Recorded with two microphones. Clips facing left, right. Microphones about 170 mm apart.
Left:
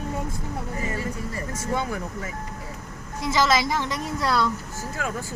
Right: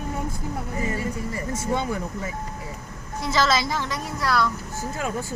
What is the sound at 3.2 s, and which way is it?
Speech, 15° left (ahead or behind).